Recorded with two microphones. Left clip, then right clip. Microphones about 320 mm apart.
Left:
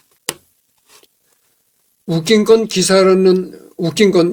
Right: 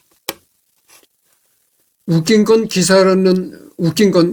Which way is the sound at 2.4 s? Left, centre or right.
Left.